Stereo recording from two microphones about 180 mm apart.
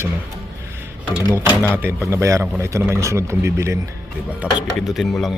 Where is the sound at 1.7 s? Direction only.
10° right (ahead or behind).